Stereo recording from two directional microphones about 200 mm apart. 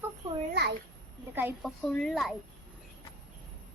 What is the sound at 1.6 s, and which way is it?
Speech, centre (ahead or behind).